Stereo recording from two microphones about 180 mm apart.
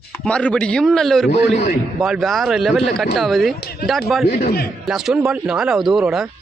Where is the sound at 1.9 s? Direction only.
Centre (ahead or behind).